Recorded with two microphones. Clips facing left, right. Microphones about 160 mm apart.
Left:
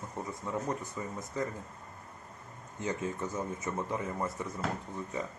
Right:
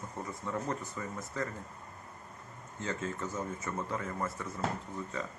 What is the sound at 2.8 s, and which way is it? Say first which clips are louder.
Speech: left 2 dB; 15° left (ahead or behind).